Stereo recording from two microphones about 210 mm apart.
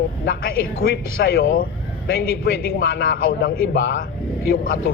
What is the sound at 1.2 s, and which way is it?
Speech, 50° left (ahead or behind).